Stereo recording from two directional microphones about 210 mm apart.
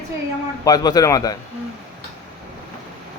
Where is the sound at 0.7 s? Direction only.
15° left (ahead or behind).